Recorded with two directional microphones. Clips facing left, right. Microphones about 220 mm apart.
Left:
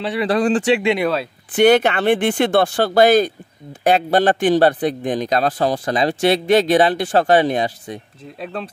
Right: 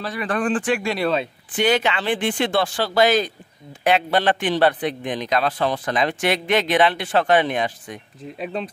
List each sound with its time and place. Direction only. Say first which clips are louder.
0.2 s speech: left 5 dB; 25° left (ahead or behind)
1.5 s a man's voice: left 7 dB; 60° left (ahead or behind); by 8.0 s 35° left (ahead or behind)
8.4 s speech: even; centre (ahead or behind)